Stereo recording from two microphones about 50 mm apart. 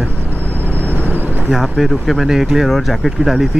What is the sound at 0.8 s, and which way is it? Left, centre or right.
Vehicle, left.